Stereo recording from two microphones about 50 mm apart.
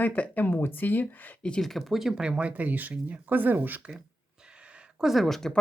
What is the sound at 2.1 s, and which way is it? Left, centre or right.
Speech, centre.